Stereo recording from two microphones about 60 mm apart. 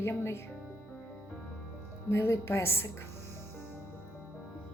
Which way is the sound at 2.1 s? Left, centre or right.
Left.